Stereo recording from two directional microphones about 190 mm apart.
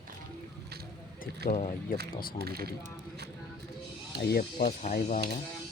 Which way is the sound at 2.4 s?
55° right (ahead or behind).